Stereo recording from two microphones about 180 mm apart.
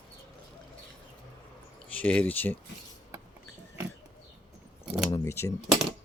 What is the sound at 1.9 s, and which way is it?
Speech, 10° left (ahead or behind).